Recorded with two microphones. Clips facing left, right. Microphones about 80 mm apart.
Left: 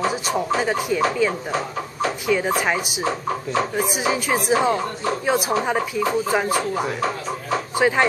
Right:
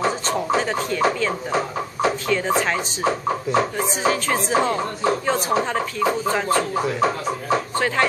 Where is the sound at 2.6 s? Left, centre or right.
Centre.